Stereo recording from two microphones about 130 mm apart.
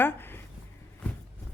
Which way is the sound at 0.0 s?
15° left (ahead or behind).